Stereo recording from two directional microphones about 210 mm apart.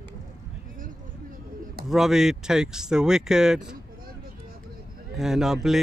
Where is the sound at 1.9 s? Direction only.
Centre (ahead or behind).